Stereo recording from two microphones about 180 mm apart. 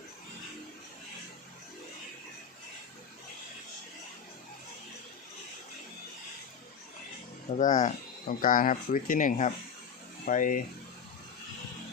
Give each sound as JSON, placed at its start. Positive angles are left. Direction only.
{"t": 7.6, "sound": "speech", "side_deg": 45}